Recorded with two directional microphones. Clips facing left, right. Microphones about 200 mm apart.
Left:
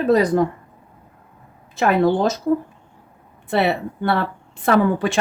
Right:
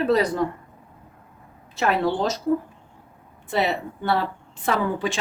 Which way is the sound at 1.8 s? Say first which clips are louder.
Left 5 dB; 50° left (ahead or behind).